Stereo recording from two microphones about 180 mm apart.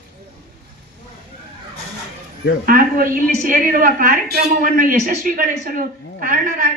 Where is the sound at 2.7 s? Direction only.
50° right (ahead or behind).